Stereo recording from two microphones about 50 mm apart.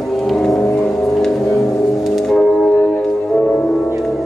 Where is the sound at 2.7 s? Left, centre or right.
Left.